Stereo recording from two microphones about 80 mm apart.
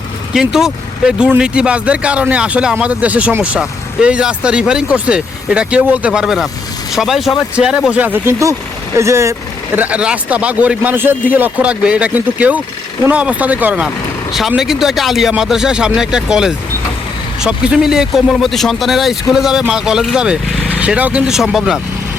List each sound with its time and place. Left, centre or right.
0.3 s speech: centre; by 9.3 s right
9.7 s speech: centre
14.5 s speech: centre